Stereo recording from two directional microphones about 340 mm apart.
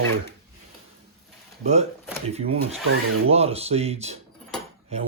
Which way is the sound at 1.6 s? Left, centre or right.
Centre.